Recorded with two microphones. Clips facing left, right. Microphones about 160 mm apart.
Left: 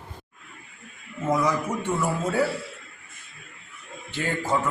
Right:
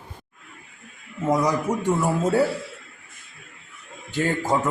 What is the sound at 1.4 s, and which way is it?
Speech, 40° right (ahead or behind).